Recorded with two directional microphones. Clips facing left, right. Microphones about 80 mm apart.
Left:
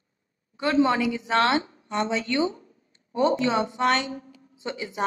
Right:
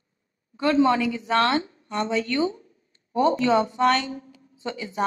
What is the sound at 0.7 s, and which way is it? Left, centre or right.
A woman's voice, centre.